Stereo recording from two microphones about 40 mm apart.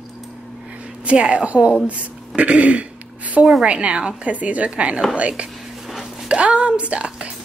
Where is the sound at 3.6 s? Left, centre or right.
Right.